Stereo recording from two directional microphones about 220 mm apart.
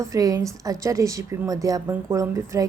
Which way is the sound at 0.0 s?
15° right (ahead or behind).